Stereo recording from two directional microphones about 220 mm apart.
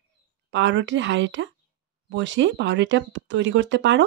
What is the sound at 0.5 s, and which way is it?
Speech, 55° right (ahead or behind).